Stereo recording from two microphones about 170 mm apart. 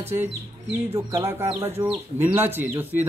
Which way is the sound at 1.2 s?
15° right (ahead or behind).